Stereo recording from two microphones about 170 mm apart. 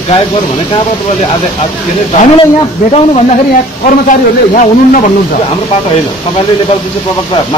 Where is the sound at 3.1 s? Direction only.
45° left (ahead or behind).